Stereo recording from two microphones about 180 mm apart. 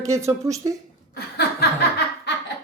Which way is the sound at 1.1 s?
65° left (ahead or behind).